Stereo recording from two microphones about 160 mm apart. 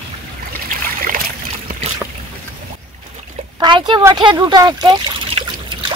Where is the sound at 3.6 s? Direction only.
25° right (ahead or behind).